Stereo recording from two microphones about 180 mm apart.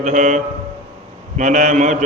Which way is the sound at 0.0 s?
45° right (ahead or behind).